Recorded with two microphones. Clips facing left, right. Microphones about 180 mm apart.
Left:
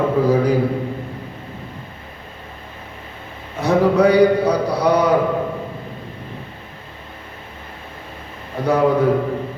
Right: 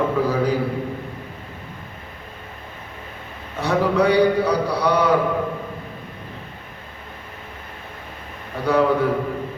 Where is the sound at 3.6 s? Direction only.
40° left (ahead or behind).